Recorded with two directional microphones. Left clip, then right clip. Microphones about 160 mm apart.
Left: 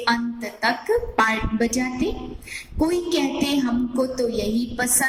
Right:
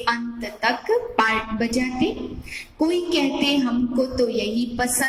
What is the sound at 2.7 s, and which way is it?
Music, 50° left (ahead or behind).